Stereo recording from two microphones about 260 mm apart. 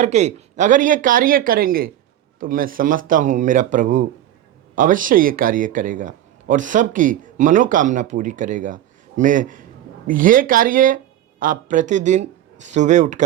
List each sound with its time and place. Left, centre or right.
0.0 s a man's voice: right